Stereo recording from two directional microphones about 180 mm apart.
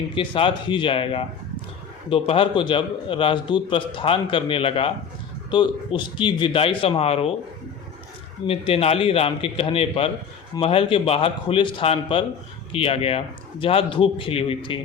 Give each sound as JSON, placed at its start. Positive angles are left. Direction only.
{"t": 0.1, "sound": "a man's voice", "side_deg": 25}
{"t": 8.4, "sound": "a man's voice", "side_deg": 30}